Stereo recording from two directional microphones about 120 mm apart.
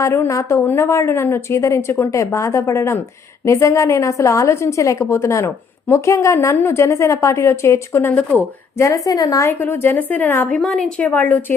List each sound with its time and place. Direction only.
0.0 s speech: 25° left (ahead or behind)
9.5 s a woman's voice: 20° left (ahead or behind)
10.6 s a woman's voice: 5° left (ahead or behind)